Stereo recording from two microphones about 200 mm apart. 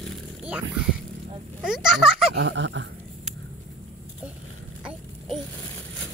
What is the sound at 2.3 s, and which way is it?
Dog, 65° right (ahead or behind).